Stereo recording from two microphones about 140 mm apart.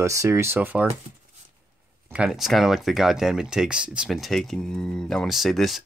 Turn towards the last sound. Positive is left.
turn(degrees=0)  # may be behind; listen again after turning